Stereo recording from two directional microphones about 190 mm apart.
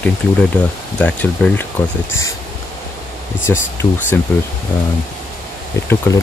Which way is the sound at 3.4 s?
15° left (ahead or behind).